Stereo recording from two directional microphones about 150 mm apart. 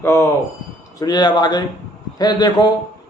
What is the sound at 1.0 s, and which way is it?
Speech, 30° left (ahead or behind).